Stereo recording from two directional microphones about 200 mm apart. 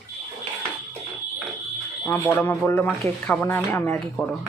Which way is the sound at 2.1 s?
10° left (ahead or behind).